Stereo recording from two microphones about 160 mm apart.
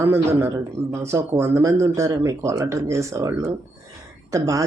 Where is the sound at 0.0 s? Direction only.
20° right (ahead or behind).